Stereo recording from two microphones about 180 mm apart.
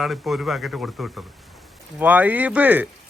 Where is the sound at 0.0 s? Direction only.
Centre (ahead or behind).